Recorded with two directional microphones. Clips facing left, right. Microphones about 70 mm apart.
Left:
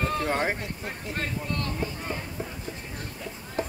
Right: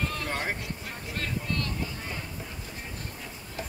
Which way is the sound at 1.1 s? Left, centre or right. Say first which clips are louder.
Even; left.